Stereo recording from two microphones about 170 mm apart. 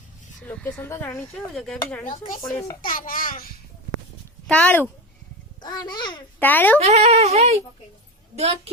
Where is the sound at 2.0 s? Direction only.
50° left (ahead or behind).